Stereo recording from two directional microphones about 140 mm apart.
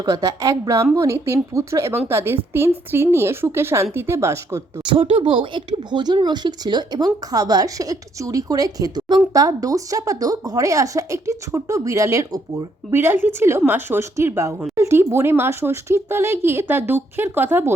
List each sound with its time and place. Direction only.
0.0 s speech: 25° right (ahead or behind)
4.8 s speech: 35° right (ahead or behind); by 17.7 s 15° right (ahead or behind)